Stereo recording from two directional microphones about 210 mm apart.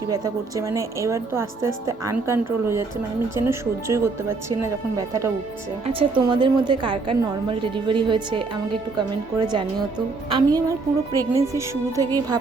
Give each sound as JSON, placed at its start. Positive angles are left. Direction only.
{"t": 0.1, "sound": "a woman's voice", "side_deg": -15}
{"t": 5.8, "sound": "a woman's voice", "side_deg": -25}